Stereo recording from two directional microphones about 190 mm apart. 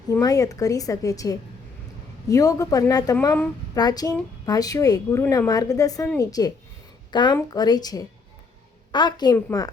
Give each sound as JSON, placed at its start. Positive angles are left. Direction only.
{"t": 0.1, "sound": "a woman's voice", "side_deg": 15}